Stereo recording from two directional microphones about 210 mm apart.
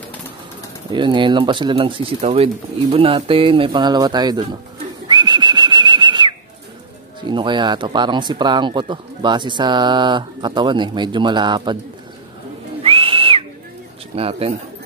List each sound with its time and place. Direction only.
0.9 s speech: 20° right (ahead or behind)
5.0 s whistling: 20° right (ahead or behind)
7.2 s speech: 20° right (ahead or behind)
12.8 s whistle: 25° right (ahead or behind)
14.1 s speech: 30° right (ahead or behind)